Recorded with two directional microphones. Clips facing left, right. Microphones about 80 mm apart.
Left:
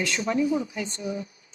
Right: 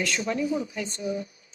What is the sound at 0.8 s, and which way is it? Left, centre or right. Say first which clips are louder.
Speech: right 1 dB; left.